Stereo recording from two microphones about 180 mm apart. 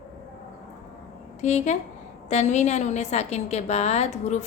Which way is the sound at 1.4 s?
40° left (ahead or behind).